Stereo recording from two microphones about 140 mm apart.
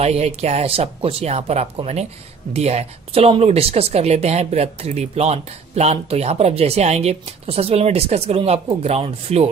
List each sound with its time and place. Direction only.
0.0 s speech: 50° right (ahead or behind)